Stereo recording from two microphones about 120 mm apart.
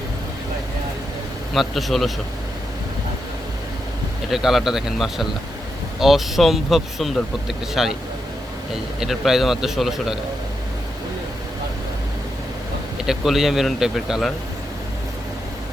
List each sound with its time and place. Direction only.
1.5 s speech: centre (ahead or behind)
4.3 s speech: centre (ahead or behind)
9.0 s speech: 5° right (ahead or behind)
13.0 s speech: 5° right (ahead or behind)